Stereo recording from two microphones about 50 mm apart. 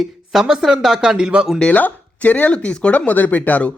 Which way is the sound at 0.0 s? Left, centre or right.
Centre.